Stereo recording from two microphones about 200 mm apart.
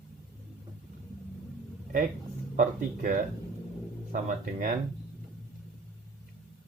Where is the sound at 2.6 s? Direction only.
40° right (ahead or behind).